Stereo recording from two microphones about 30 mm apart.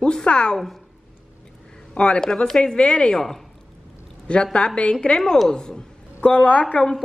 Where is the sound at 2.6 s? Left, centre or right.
Left.